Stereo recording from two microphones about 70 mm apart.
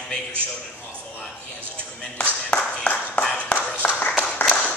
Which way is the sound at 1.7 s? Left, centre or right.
Centre.